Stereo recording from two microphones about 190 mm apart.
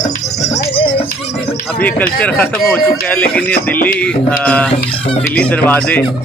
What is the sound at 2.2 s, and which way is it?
Speech, 5° left (ahead or behind).